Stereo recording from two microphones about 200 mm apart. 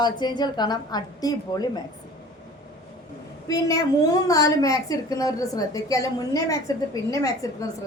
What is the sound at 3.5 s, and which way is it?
A woman's voice, 15° left (ahead or behind).